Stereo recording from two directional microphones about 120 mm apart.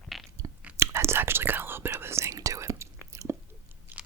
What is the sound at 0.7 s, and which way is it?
Whispering, 20° right (ahead or behind).